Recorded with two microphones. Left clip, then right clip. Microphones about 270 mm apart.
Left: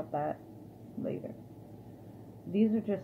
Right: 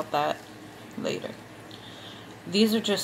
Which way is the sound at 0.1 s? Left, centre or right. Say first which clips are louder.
Right 8 dB; centre.